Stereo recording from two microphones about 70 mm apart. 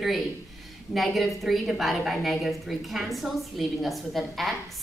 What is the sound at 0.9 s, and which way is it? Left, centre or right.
A woman's voice, centre.